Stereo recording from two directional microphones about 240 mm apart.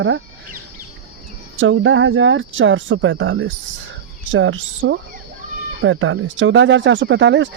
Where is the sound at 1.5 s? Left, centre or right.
Right.